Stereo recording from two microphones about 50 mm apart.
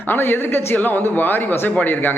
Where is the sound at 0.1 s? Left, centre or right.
Left.